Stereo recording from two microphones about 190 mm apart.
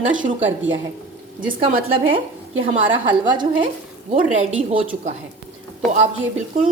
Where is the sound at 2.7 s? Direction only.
25° right (ahead or behind).